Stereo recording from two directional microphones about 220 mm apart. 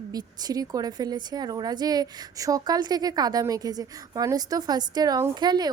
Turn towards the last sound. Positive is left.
turn(degrees=-20)  # may be behind; listen again after turning